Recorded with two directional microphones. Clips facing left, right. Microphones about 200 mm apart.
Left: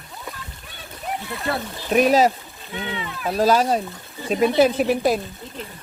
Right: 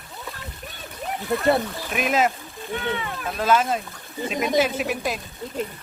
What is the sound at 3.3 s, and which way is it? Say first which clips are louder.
Speech: left 4 dB; 35° left (ahead or behind).